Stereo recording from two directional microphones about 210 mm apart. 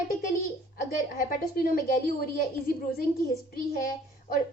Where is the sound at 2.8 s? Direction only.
45° left (ahead or behind).